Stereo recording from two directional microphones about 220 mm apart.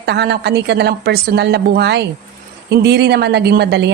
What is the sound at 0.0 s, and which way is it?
A woman's voice, 50° right (ahead or behind).